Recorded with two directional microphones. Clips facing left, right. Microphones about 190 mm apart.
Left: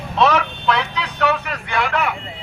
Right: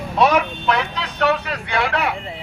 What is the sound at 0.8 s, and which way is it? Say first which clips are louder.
Speech: even; 40° right (ahead or behind).